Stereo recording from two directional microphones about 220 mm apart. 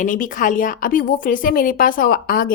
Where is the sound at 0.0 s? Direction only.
35° left (ahead or behind).